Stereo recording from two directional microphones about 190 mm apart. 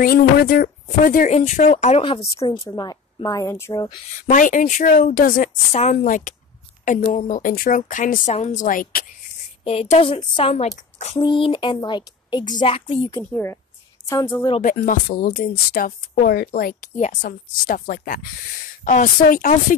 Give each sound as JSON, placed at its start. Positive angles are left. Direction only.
{"t": 0.0, "sound": "speech", "side_deg": 50}
{"t": 4.2, "sound": "a woman's voice", "side_deg": 45}
{"t": 9.7, "sound": "a woman's voice", "side_deg": 30}
{"t": 11.1, "sound": "speech", "side_deg": 25}
{"t": 13.1, "sound": "a woman's voice", "side_deg": 15}
{"t": 14.6, "sound": "speech", "side_deg": 45}
{"t": 16.9, "sound": "speech", "side_deg": 40}